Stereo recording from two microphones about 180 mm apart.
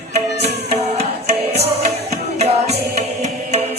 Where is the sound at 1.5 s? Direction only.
35° right (ahead or behind).